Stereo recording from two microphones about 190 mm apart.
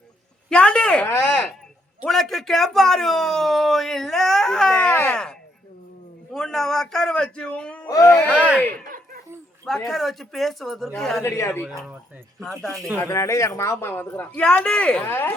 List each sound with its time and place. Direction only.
0.5 s speech: 5° left (ahead or behind)
2.0 s speech: centre (ahead or behind)
6.3 s a man's voice: centre (ahead or behind)
7.9 s speech: 15° left (ahead or behind)
8.3 s speech: 5° right (ahead or behind)
9.6 s speech: centre (ahead or behind)
11.2 s speech: 15° left (ahead or behind)
12.4 s speech: 5° left (ahead or behind)
13.0 s speech: 15° left (ahead or behind)